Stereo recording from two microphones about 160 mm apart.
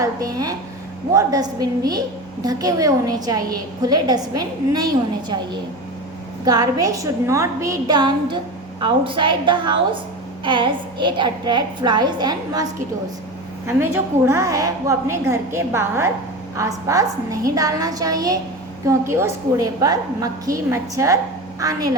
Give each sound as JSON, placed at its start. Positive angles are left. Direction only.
{"t": 0.0, "sound": "a woman's voice", "side_deg": -20}
{"t": 6.4, "sound": "a woman's voice", "side_deg": -25}
{"t": 13.7, "sound": "a woman's voice", "side_deg": -15}